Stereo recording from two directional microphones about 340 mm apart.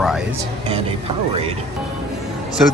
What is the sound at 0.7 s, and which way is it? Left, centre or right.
Speech, centre.